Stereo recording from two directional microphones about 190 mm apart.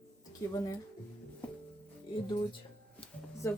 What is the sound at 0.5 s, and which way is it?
Speech, 20° left (ahead or behind).